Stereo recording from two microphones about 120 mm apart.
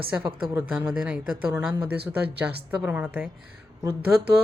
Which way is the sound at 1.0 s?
5° right (ahead or behind).